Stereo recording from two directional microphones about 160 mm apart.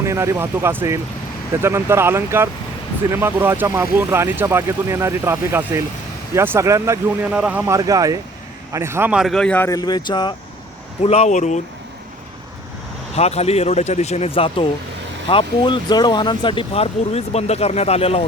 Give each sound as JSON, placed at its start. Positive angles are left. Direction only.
{"t": 0.0, "sound": "a man's voice", "side_deg": -15}
{"t": 9.6, "sound": "speech", "side_deg": 25}
{"t": 11.0, "sound": "speech", "side_deg": 40}
{"t": 13.1, "sound": "speech", "side_deg": 40}